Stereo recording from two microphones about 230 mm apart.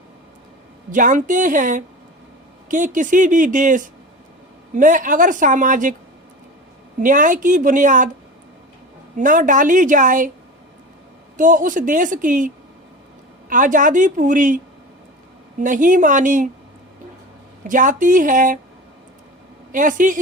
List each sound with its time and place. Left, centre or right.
0.9 s speech: right
7.0 s speech: right
9.1 s speech: right
11.3 s speech: right
13.5 s speech: right
15.6 s speech: right
17.6 s speech: right
19.7 s speech: right